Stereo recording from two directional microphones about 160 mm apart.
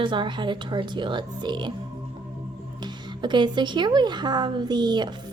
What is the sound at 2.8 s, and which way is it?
A woman's voice, 30° right (ahead or behind).